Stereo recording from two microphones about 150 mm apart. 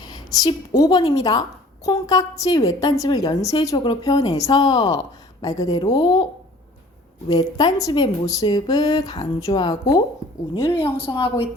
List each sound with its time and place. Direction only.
0.0 s a woman's voice: 25° left (ahead or behind)
7.3 s a woman's voice: 25° left (ahead or behind)
10.8 s a woman's voice: 35° left (ahead or behind)